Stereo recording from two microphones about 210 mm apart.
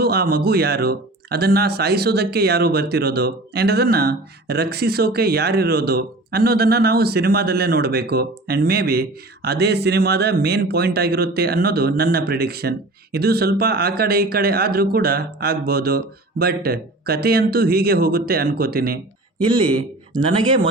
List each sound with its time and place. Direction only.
0.0 s speech: 50° right (ahead or behind)
19.4 s speech: 20° right (ahead or behind)